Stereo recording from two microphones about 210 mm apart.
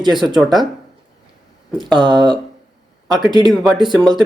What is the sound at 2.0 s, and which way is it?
Speech, 20° right (ahead or behind).